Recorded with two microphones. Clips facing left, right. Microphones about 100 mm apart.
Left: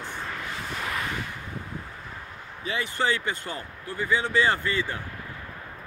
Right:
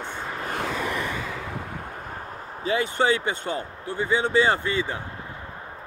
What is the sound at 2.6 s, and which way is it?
Speech, 30° right (ahead or behind).